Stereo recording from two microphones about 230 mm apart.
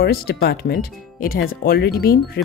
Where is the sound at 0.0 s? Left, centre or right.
Left.